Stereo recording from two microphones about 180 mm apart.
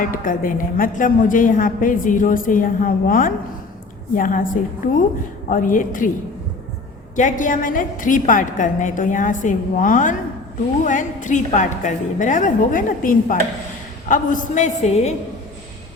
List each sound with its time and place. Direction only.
0.0 s a woman's voice: 50° left (ahead or behind)
5.5 s a woman's voice: 50° left (ahead or behind)
7.2 s a woman's voice: 45° left (ahead or behind)